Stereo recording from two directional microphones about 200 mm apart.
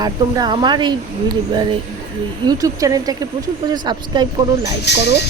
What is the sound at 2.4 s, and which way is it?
Speech, 15° right (ahead or behind).